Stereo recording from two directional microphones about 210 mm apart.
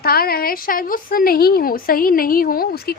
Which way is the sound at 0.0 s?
45° left (ahead or behind).